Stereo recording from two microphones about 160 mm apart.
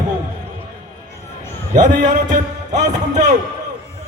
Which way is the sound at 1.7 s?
50° right (ahead or behind).